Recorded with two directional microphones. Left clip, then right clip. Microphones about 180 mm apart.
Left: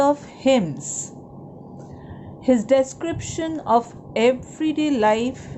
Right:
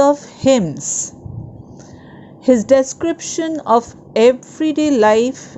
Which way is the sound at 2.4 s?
35° right (ahead or behind).